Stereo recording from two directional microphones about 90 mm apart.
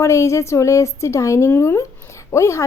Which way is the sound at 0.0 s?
35° left (ahead or behind).